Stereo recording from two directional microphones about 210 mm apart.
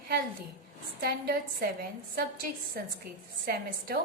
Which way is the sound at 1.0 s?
45° right (ahead or behind).